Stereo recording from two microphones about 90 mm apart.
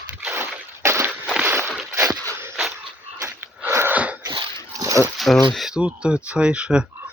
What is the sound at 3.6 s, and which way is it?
Wheeze, 25° right (ahead or behind).